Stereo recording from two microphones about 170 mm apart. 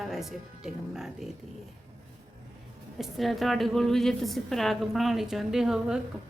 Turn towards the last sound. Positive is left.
turn(degrees=-5)  # may be behind; listen again after turning